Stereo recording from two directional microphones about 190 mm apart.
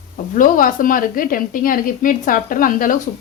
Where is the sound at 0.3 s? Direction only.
45° left (ahead or behind).